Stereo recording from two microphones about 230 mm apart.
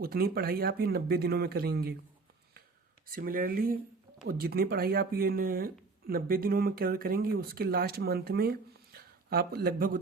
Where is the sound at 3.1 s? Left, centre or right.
Right.